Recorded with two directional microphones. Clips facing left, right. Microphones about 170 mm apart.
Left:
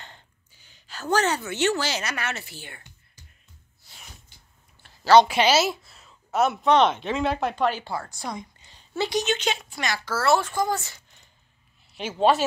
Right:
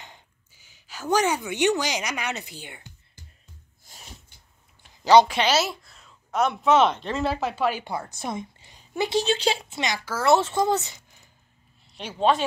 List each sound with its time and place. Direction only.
0.0 s speech: 10° right (ahead or behind)
3.9 s a sound: 45° right (ahead or behind)
4.8 s a sound: 15° right (ahead or behind)
5.2 s speech: 5° left (ahead or behind)
7.8 s speech: 20° right (ahead or behind)
9.2 s speech: 30° right (ahead or behind)
11.9 s speech: 5° left (ahead or behind)